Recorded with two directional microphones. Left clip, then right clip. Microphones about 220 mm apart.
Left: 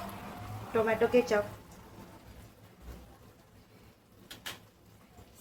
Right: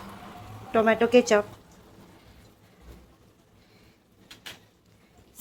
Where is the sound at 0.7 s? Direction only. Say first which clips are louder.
Right 7 dB; 55° right (ahead or behind).